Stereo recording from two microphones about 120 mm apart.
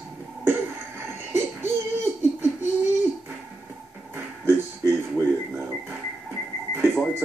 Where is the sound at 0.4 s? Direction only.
20° right (ahead or behind).